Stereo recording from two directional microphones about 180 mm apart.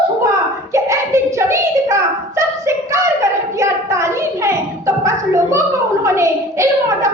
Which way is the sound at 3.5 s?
15° right (ahead or behind).